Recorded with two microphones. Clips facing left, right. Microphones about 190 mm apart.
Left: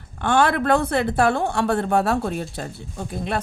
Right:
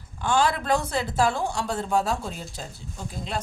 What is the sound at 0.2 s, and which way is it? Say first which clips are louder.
A woman's voice: left 4 dB; 60° left (ahead or behind).